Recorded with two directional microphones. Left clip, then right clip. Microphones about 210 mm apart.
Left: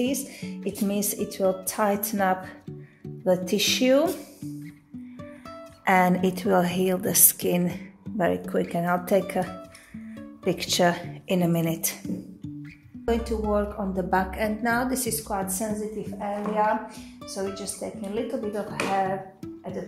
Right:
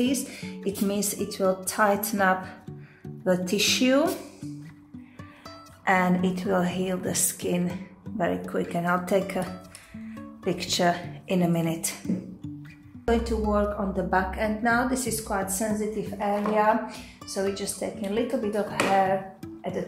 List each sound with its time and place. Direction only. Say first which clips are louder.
0.0 s speech: right 1 dB; 20° left (ahead or behind)
5.9 s a woman's voice: left 2 dB; 35° left (ahead or behind)
13.0 s speech: right 1 dB; 25° left (ahead or behind)
15.7 s speech: right 2 dB; 5° left (ahead or behind)